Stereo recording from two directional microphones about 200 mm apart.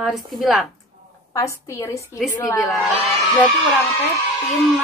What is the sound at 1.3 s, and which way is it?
A woman's voice, 15° left (ahead or behind).